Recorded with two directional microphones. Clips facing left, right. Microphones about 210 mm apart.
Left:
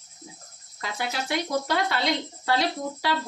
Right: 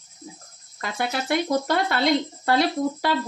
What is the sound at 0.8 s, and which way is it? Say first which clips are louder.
Speech: right 4 dB; 55° right (ahead or behind).